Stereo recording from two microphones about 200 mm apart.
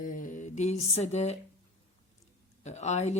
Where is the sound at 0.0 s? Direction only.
40° left (ahead or behind).